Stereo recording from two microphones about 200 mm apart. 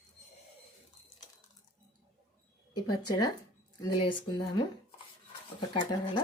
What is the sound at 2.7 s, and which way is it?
Speech, 20° left (ahead or behind).